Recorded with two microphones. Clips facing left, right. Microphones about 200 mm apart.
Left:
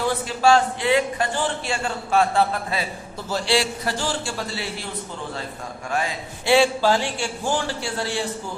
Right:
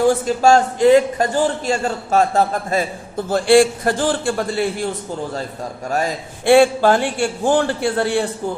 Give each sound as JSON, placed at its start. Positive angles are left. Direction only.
{"t": 0.0, "sound": "speech", "side_deg": -45}
{"t": 5.9, "sound": "a man's voice", "side_deg": -45}